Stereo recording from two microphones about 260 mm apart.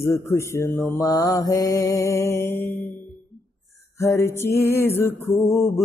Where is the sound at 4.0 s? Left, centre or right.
Centre.